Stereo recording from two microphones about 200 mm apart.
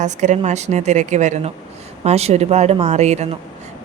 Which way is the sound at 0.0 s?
35° right (ahead or behind).